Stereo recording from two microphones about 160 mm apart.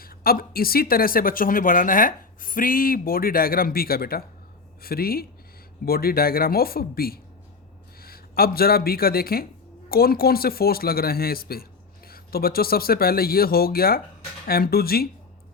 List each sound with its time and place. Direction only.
0.0 s speech: 65° left (ahead or behind)